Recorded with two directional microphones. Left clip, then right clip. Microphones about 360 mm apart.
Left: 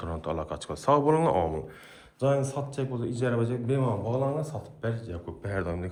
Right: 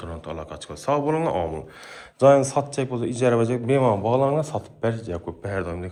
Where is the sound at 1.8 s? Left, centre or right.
Centre.